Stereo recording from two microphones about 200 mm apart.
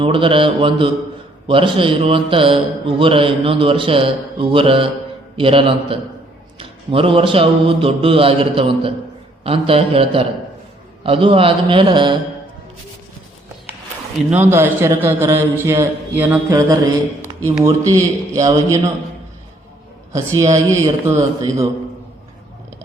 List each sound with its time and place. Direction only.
0.0 s a man's voice: 25° right (ahead or behind)
14.3 s a man's voice: 10° right (ahead or behind)
20.4 s a man's voice: 15° right (ahead or behind)